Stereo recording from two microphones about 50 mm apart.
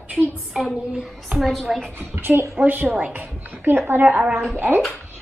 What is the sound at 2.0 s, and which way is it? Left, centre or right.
Speech, right.